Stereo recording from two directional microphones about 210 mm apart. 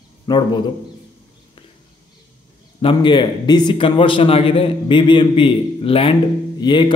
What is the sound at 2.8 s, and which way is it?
A man's voice, 25° left (ahead or behind).